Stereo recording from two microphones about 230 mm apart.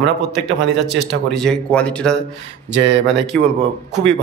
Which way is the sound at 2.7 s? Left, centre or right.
Right.